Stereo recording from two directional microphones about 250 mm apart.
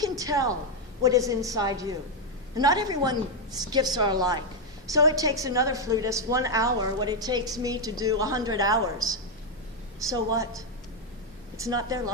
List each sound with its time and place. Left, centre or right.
0.0 s a sound: centre
1.0 s a woman's voice: centre
10.1 s a woman's voice: centre
11.6 s a woman's voice: centre